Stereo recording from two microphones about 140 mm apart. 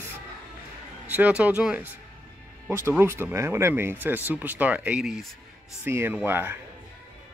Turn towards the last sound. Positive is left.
turn(degrees=-15)  # may be behind; listen again after turning